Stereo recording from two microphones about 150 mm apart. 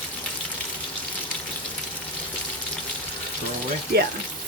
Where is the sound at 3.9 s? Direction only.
90° right.